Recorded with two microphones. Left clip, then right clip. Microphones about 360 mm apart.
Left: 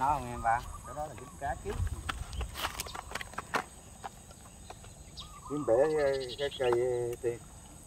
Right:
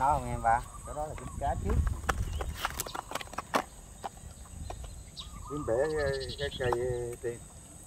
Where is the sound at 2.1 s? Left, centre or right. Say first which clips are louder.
Right 6 dB; centre.